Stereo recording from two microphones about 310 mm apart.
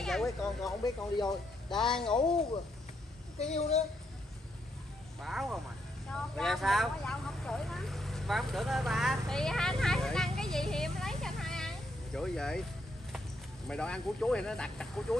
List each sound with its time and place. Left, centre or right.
0.0 s speech: centre
3.3 s a woman's voice: left
5.2 s speech: centre
13.7 s speech: centre